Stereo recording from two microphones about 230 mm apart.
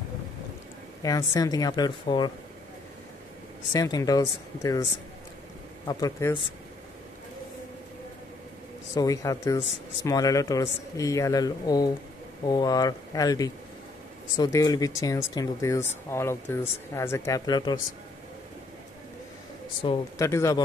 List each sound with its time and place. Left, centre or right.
1.0 s speech: centre
3.7 s speech: centre
5.9 s speech: centre
8.9 s speech: centre
19.8 s speech: centre